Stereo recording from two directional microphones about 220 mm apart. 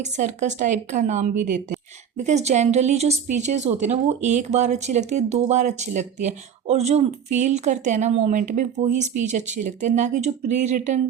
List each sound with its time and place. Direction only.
0.0 s speech: 35° right (ahead or behind)